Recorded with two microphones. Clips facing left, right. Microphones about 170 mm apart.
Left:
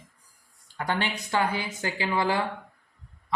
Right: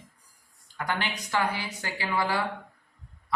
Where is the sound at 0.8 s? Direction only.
25° left (ahead or behind).